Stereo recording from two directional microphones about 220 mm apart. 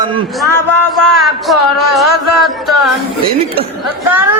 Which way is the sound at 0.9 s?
Centre (ahead or behind).